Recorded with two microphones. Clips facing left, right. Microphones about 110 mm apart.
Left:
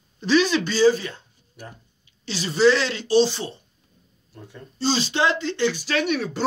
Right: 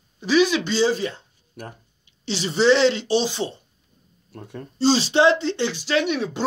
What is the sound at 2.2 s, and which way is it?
Speech, 25° right (ahead or behind).